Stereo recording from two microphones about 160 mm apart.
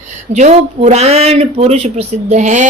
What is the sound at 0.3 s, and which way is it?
A woman's voice, 45° right (ahead or behind).